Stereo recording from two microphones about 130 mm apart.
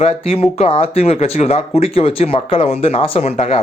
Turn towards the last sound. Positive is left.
turn(degrees=55)  # may be behind; listen again after turning